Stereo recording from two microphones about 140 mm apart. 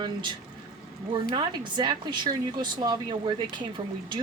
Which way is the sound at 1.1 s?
35° right (ahead or behind).